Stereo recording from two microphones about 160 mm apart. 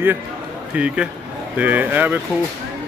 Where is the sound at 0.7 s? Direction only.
5° right (ahead or behind).